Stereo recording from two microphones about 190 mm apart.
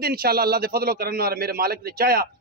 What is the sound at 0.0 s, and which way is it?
A man's voice, 50° right (ahead or behind).